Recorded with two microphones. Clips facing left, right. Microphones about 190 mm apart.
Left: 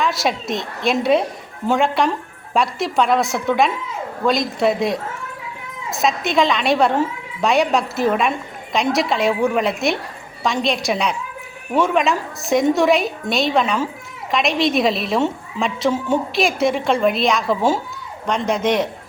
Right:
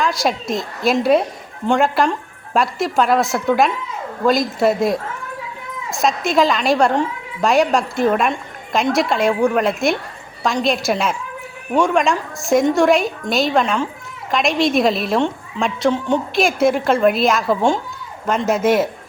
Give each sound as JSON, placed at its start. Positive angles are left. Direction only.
{"t": 0.0, "sound": "a woman's voice", "side_deg": 0}